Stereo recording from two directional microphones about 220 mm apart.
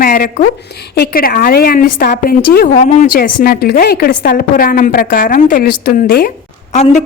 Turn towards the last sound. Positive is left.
turn(degrees=30)  # may be behind; listen again after turning